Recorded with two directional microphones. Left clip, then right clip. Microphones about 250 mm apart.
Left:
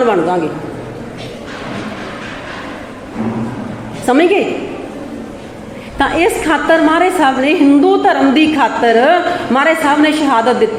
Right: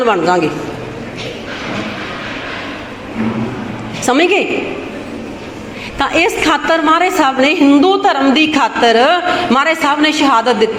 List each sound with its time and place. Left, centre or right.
0.0 s a woman's voice: centre
4.0 s a woman's voice: centre
6.0 s a woman's voice: centre